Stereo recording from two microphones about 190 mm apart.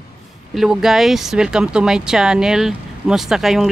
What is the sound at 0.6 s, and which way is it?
Speech, centre (ahead or behind).